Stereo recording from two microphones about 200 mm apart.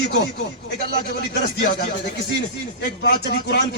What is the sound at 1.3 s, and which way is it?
Speech, 55° left (ahead or behind).